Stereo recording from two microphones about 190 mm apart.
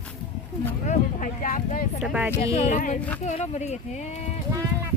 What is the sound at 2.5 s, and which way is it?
Speech, 35° left (ahead or behind).